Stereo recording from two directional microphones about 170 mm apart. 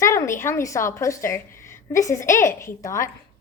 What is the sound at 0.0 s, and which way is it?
A woman's voice, 15° left (ahead or behind).